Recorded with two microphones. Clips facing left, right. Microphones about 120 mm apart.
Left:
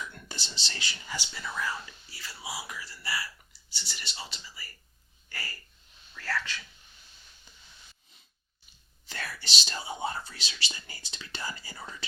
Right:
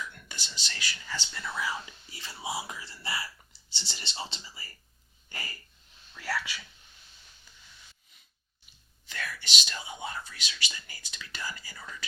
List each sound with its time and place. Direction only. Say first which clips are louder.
0.1 s speech: left 2 dB; 30° left (ahead or behind)
1.1 s speech: even; 10° left (ahead or behind)
1.6 s speech: even; 15° right (ahead or behind)
6.1 s whispering: even; 10° right (ahead or behind)
7.5 s a sound: even; 20° left (ahead or behind)
9.0 s speech: right 1 dB; 35° left (ahead or behind)